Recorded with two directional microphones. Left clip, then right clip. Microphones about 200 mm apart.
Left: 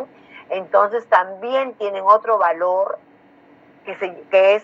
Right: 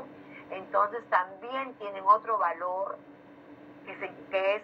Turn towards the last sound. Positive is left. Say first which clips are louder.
# left 15 dB
turn(degrees=55)  # may be behind; listen again after turning